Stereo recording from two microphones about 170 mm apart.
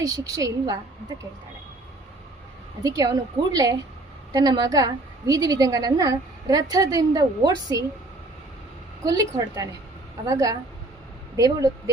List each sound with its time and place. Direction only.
0.0 s a woman's voice: 20° right (ahead or behind)
2.8 s a woman's voice: 20° right (ahead or behind)
9.0 s a woman's voice: 20° right (ahead or behind)